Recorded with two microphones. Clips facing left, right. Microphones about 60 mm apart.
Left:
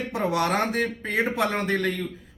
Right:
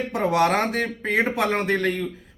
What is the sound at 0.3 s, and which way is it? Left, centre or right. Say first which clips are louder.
A man's voice: right 4 dB; right.